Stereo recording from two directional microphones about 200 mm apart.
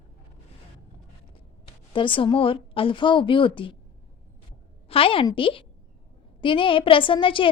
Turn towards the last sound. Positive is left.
turn(degrees=25)  # may be behind; listen again after turning